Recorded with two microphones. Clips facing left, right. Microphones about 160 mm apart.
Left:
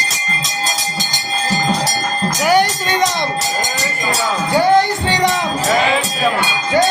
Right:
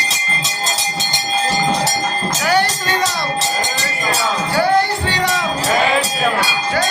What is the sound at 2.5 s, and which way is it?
Music, 15° left (ahead or behind).